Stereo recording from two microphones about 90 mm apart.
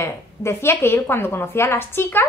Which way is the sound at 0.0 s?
30° left (ahead or behind).